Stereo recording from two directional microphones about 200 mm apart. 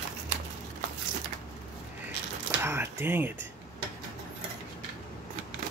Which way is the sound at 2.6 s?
10° right (ahead or behind).